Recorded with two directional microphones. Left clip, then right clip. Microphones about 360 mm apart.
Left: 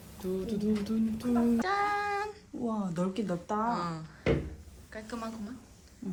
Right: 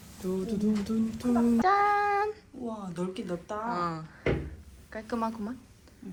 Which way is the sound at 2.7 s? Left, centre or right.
Left.